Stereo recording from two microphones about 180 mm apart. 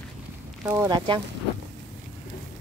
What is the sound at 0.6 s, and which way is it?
Speech, 15° right (ahead or behind).